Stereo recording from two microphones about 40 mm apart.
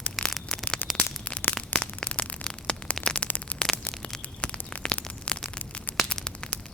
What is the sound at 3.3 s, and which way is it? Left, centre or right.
Static, left.